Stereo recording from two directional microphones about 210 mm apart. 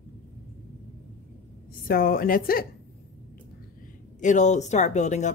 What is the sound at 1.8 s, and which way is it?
Speech, 45° left (ahead or behind).